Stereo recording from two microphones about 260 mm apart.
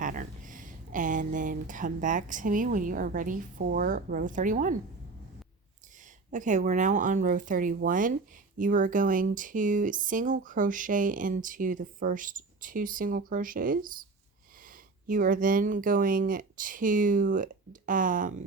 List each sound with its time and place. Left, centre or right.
0.0 s speech: right
6.3 s speech: right
15.0 s speech: right